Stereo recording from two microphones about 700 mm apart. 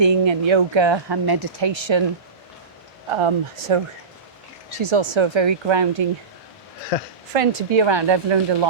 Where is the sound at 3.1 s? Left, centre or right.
Right.